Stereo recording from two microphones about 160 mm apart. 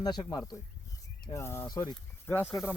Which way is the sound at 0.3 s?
25° left (ahead or behind).